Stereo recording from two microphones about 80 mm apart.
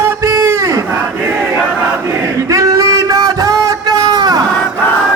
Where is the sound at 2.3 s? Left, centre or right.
Right.